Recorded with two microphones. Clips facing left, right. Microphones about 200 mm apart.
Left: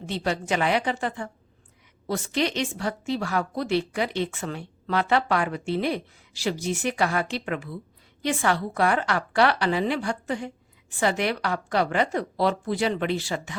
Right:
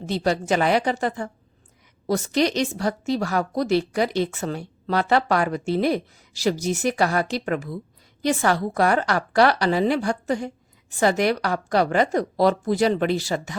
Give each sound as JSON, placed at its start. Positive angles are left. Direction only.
{"t": 0.0, "sound": "a woman's voice", "side_deg": -40}